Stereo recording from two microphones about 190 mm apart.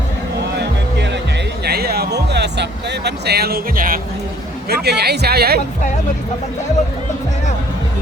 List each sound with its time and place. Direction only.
0.5 s music: 65° right (ahead or behind)
1.6 s a sound: 55° right (ahead or behind)
4.7 s speech: 60° right (ahead or behind)